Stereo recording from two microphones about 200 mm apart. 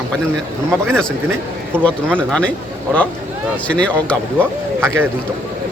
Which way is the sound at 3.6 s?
5° left (ahead or behind).